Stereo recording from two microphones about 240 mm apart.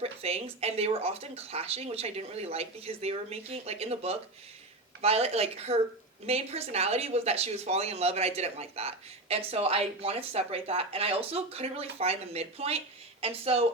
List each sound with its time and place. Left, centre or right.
0.0 s speech: right